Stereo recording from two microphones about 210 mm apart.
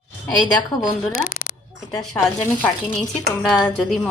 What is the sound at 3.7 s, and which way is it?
Speech, 5° left (ahead or behind).